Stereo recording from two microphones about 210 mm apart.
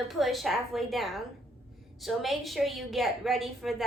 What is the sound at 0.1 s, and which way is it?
A woman's voice, centre (ahead or behind).